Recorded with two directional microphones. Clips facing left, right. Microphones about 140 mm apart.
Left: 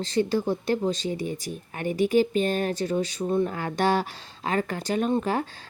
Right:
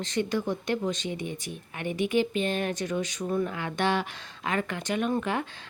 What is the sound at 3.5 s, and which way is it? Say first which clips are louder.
A woman's voice: left 3 dB; 40° left (ahead or behind).